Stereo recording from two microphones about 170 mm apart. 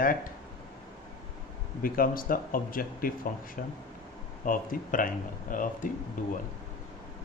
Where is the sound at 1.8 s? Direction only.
55° left (ahead or behind).